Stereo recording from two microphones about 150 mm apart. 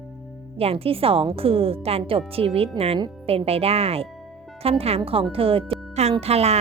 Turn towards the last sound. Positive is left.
turn(degrees=-45)  # may be behind; listen again after turning